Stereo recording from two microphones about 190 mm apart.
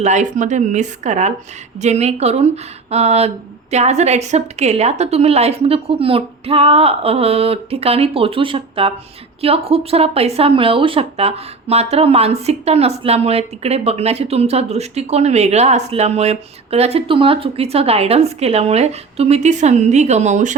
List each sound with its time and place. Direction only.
0.0 s speech: 40° right (ahead or behind)